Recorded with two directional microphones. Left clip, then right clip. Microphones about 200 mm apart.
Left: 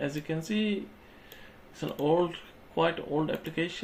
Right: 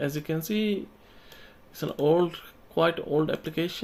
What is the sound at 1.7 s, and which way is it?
Speech, 55° right (ahead or behind).